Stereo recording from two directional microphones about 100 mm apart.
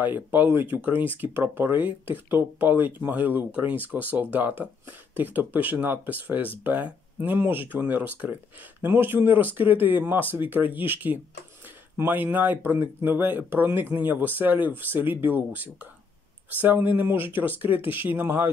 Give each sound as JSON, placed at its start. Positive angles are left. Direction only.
{"t": 0.0, "sound": "speech", "side_deg": -20}